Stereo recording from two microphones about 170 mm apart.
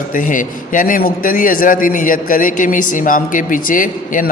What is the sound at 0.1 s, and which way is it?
A man's voice, 50° left (ahead or behind).